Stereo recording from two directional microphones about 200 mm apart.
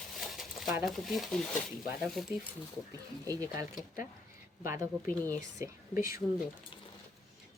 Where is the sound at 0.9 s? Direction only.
Centre (ahead or behind).